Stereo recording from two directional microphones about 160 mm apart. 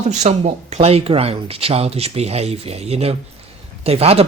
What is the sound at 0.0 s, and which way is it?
Speech, 45° right (ahead or behind).